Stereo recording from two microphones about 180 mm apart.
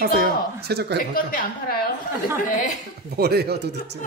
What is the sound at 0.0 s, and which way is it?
Speech, 60° right (ahead or behind).